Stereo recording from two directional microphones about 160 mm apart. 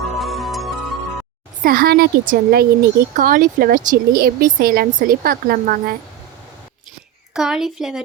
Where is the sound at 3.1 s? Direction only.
60° right (ahead or behind).